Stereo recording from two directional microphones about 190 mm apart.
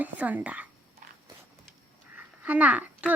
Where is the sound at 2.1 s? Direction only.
10° right (ahead or behind).